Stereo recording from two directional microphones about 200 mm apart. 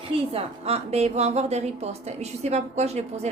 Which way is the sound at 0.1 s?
30° right (ahead or behind).